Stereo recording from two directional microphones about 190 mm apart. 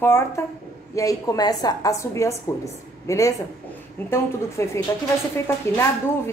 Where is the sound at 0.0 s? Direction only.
15° left (ahead or behind).